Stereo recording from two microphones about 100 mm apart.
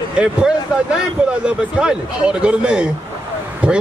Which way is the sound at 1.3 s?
10° right (ahead or behind).